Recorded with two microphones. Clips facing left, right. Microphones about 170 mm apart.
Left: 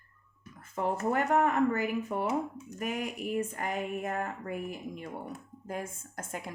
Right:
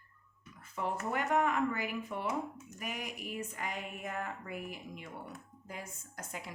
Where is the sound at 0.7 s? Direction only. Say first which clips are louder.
Left 6 dB; 45° left (ahead or behind).